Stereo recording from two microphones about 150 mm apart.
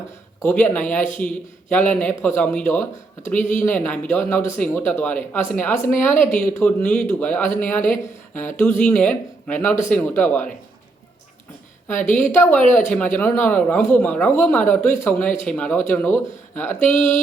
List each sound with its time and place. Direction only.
0.4 s a man's voice: 10° left (ahead or behind)
11.9 s a man's voice: 15° left (ahead or behind)